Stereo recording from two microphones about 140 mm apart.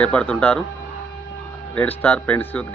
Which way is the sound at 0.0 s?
10° left (ahead or behind).